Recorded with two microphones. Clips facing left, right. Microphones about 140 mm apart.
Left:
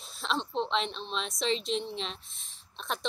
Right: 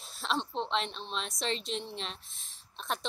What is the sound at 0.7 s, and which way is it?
A woman's voice, 45° right (ahead or behind).